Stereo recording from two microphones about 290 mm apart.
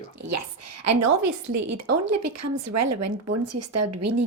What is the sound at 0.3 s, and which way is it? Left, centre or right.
A woman's voice, right.